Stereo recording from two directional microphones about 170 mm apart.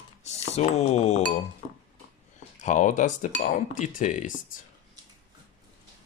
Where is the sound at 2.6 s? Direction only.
45° left (ahead or behind).